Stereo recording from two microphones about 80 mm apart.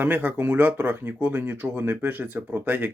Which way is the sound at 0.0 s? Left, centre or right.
Right.